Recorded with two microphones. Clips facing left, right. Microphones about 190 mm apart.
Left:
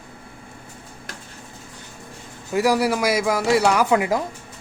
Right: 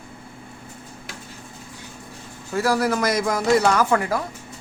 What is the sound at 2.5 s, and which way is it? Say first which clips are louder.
Speech: left 2 dB; 15° left (ahead or behind).